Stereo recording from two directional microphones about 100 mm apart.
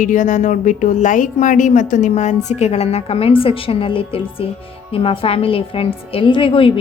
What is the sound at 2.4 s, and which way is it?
A woman's voice, 90° left.